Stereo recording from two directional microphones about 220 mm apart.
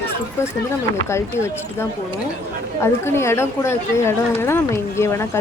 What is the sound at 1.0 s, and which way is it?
Speech, 10° left (ahead or behind).